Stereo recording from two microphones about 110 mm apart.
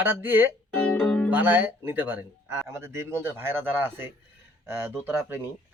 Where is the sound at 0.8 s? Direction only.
5° left (ahead or behind).